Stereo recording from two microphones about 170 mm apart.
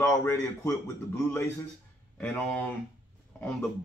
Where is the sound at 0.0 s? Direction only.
15° left (ahead or behind).